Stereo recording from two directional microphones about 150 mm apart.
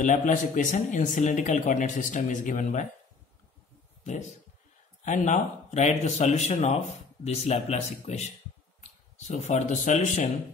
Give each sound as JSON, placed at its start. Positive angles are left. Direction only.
{"t": 0.0, "sound": "speech", "side_deg": 60}
{"t": 4.0, "sound": "speech", "side_deg": 50}